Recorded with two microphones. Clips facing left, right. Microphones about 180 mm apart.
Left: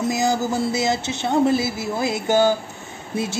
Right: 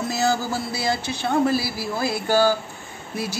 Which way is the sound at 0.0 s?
15° left (ahead or behind).